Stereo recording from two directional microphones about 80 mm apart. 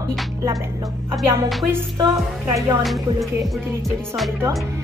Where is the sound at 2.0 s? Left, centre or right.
Right.